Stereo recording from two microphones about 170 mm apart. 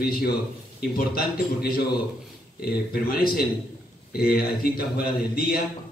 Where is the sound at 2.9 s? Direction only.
60° left (ahead or behind).